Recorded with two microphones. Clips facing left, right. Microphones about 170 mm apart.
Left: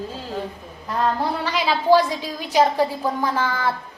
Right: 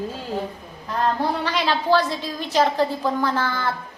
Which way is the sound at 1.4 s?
5° left (ahead or behind).